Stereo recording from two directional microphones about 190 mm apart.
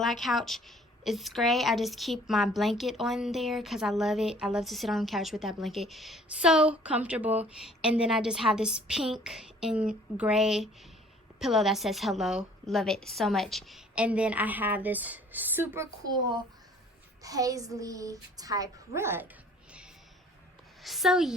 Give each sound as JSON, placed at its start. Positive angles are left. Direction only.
{"t": 0.0, "sound": "a woman's voice", "side_deg": 0}
{"t": 20.8, "sound": "a woman's voice", "side_deg": 0}